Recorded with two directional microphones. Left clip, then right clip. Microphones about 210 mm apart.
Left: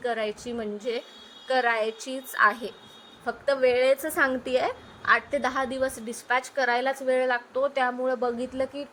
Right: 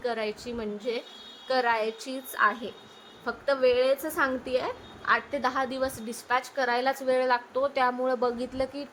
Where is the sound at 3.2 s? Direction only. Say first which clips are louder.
Left 1 dB; 10° left (ahead or behind).